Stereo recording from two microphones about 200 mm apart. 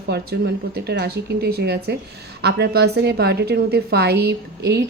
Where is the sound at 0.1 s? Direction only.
55° right (ahead or behind).